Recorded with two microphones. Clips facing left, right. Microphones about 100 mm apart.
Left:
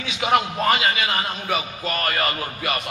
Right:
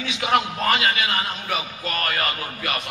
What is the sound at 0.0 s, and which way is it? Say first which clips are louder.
A man's voice: left 1 dB; 10° left (ahead or behind).